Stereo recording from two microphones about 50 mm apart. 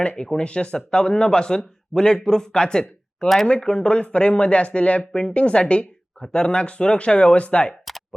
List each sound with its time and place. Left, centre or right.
0.0 s speech: left